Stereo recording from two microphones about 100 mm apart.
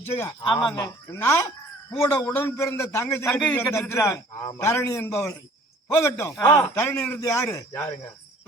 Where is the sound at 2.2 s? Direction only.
20° left (ahead or behind).